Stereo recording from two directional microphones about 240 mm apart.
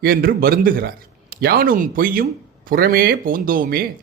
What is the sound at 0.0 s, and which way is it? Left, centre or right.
Speech, right.